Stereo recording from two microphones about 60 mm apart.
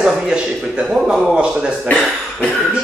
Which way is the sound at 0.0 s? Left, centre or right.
Centre.